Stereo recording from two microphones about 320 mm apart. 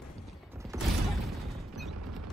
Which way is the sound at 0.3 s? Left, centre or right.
Centre.